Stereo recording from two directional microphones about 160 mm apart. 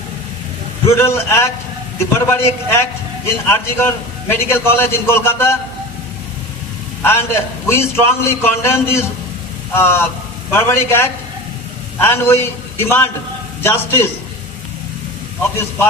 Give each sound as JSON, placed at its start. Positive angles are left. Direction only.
{"t": 0.8, "sound": "a man's voice", "side_deg": 15}
{"t": 7.0, "sound": "a man's voice", "side_deg": 15}